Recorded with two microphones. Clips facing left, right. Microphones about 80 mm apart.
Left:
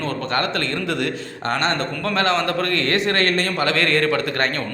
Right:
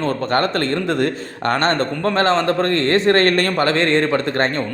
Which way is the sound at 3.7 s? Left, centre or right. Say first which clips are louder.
Right 3 dB; right.